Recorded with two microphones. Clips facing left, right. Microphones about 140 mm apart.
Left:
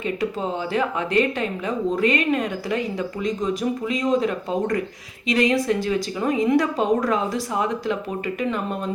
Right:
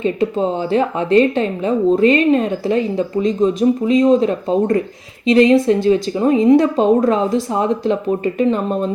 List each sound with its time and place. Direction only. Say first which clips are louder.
0.0 s a woman's voice: right 8 dB; 25° right (ahead or behind)